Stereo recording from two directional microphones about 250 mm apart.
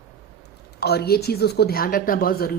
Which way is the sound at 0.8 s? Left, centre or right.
Left.